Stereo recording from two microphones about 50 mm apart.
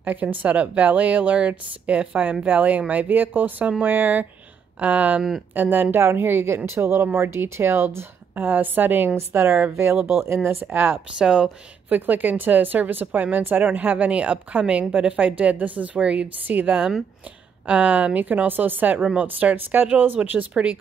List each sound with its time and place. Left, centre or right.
0.0 s speech: right
5.9 s speech: right
9.1 s speech: right
9.9 s speech: centre
10.2 s speech: right
11.1 s speech: centre
11.9 s a woman's voice: right
16.4 s a woman's voice: right
19.5 s speech: right
20.2 s a woman's voice: right